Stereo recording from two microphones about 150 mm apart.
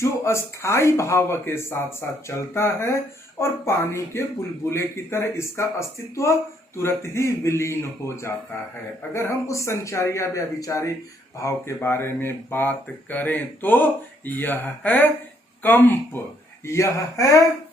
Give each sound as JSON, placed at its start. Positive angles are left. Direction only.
{"t": 0.0, "sound": "speech", "side_deg": 20}
{"t": 6.7, "sound": "a man's voice", "side_deg": 15}